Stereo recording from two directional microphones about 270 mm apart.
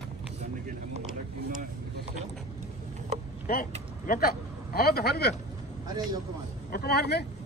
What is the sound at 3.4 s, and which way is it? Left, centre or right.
Speech, left.